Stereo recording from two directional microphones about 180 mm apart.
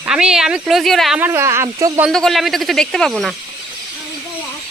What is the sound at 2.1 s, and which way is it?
Speech, centre (ahead or behind).